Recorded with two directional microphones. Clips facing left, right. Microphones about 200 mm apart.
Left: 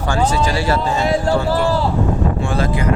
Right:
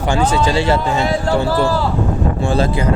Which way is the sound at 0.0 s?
20° right (ahead or behind).